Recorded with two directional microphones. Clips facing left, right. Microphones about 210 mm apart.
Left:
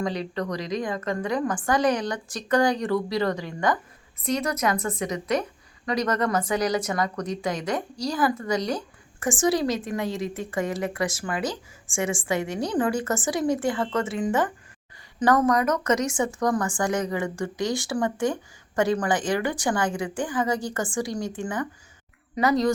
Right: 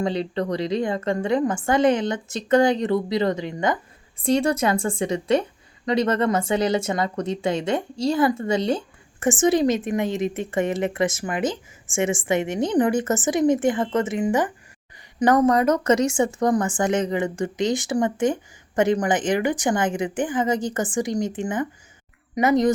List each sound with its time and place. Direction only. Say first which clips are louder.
0.0 s a woman's voice: right 4 dB; 30° right (ahead or behind)